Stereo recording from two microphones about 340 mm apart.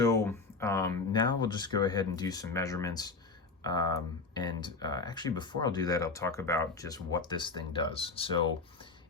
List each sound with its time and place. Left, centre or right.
0.0 s speech: centre